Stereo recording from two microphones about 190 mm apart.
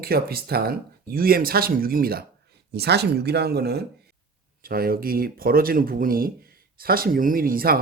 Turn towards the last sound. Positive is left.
turn(degrees=-50)  # may be behind; listen again after turning